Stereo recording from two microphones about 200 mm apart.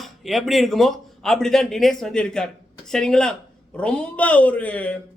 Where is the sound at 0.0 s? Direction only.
Centre (ahead or behind).